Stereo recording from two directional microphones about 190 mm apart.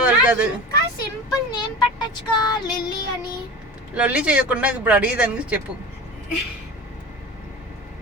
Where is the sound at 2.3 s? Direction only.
20° left (ahead or behind).